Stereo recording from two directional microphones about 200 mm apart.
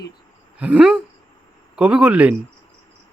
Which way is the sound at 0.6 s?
5° right (ahead or behind).